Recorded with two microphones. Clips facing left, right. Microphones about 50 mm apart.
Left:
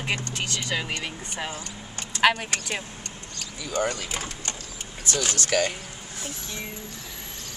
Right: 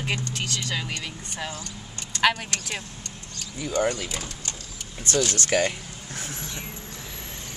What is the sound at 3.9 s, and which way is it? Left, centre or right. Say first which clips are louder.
Speech: even; left.